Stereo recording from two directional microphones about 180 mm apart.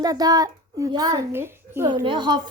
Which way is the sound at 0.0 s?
20° right (ahead or behind).